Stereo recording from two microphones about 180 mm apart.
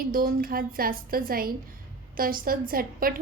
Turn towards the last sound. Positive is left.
turn(degrees=-55)  # may be behind; listen again after turning